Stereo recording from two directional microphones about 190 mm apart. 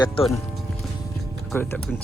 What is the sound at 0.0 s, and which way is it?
Speech, 20° left (ahead or behind).